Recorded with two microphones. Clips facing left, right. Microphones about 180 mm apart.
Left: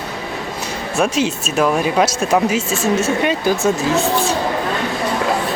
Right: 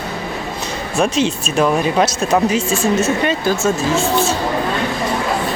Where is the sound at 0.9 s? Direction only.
10° left (ahead or behind).